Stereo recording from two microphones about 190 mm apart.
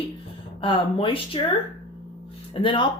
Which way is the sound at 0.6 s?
30° left (ahead or behind).